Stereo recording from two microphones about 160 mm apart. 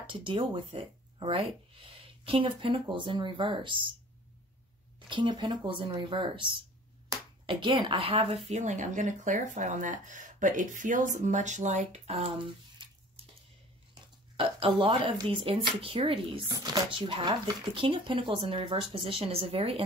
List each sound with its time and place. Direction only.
0.0 s speech: 30° right (ahead or behind)
5.1 s speech: 30° right (ahead or behind)
12.7 s a sound: 35° right (ahead or behind)
14.3 s speech: 35° right (ahead or behind)